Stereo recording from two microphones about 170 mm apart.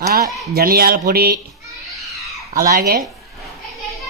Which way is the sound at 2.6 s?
65° right (ahead or behind).